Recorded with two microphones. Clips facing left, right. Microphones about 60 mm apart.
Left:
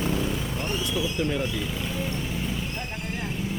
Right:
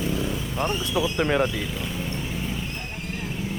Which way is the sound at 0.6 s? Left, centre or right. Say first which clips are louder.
Right 6 dB; right.